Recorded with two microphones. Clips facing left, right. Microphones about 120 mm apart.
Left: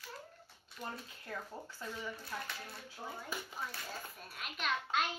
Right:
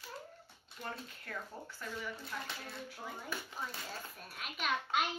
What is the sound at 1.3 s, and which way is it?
Speech, 20° left (ahead or behind).